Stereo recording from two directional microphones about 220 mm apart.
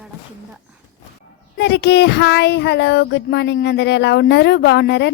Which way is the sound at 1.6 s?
50° left (ahead or behind).